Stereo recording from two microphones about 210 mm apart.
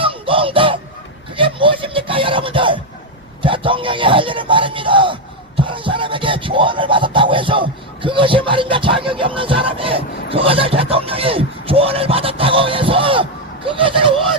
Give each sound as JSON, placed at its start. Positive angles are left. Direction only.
{"t": 0.0, "sound": "music", "side_deg": -25}
{"t": 1.4, "sound": "a sound", "side_deg": -25}
{"t": 3.4, "sound": "speech", "side_deg": -25}